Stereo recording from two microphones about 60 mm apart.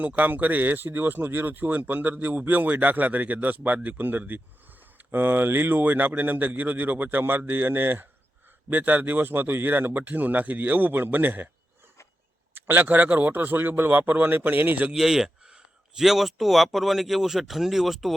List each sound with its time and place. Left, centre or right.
0.0 s speech: right
12.5 s speech: right
14.9 s speech: centre